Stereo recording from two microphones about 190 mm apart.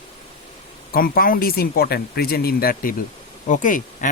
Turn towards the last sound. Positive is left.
turn(degrees=45)  # may be behind; listen again after turning